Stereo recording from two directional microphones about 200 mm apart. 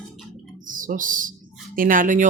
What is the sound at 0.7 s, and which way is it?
Speech, 40° right (ahead or behind).